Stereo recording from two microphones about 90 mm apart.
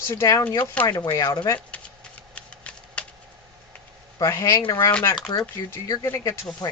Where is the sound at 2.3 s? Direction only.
15° left (ahead or behind).